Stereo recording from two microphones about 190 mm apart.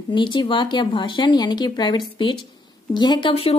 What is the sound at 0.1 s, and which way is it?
A woman's voice, 25° left (ahead or behind).